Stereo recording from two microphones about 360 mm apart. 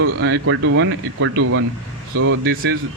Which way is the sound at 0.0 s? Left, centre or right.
Right.